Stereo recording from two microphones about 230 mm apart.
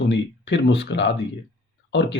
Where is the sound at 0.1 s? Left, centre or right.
Left.